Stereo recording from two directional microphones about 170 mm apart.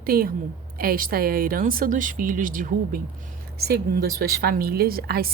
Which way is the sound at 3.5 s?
65° right (ahead or behind).